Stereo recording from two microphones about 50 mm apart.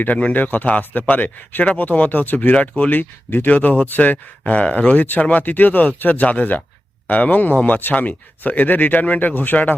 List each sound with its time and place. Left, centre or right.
0.0 s a man's voice: left
2.9 s a man's voice: left